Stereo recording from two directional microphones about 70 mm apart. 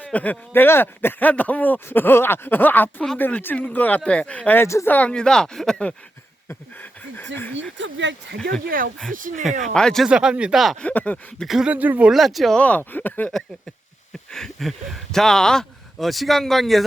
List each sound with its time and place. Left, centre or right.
0.0 s a man's voice: left
4.6 s speech: left
4.9 s a man's voice: left
5.1 s speech: centre
7.2 s a man's voice: left
8.4 s speech: centre
10.1 s speech: centre
10.8 s a man's voice: centre
11.4 s speech: centre
11.7 s speech: right
12.1 s speech: centre
12.5 s a man's voice: left
14.3 s speech: centre